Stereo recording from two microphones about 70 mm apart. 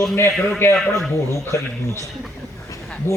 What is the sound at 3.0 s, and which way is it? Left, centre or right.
Speech, left.